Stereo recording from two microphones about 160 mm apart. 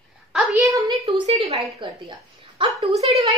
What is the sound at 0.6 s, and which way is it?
Speech, 20° right (ahead or behind).